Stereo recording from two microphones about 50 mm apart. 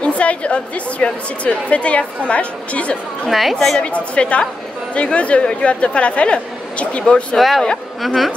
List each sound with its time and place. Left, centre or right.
0.0 s a woman's voice: left
3.3 s speech: centre
3.8 s a woman's voice: left
7.3 s speech: centre